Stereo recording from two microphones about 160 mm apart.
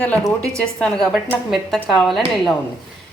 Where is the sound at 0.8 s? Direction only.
5° left (ahead or behind).